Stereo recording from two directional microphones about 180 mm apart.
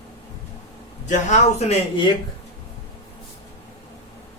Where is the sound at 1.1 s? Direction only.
40° left (ahead or behind).